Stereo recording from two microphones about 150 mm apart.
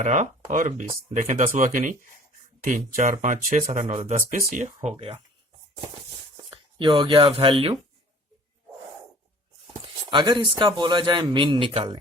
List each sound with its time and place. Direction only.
0.0 s speech: 55° right (ahead or behind)
4.3 s speech: 60° right (ahead or behind)
6.5 s speech: 30° right (ahead or behind)
9.8 s a man's voice: 30° right (ahead or behind)